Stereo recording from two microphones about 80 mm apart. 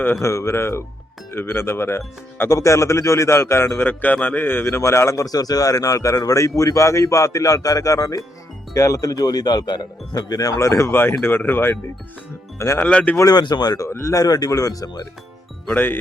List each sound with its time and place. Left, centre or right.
0.2 s speech: left
12.8 s speech: centre
13.1 s speech: left
13.8 s speech: left
15.7 s speech: left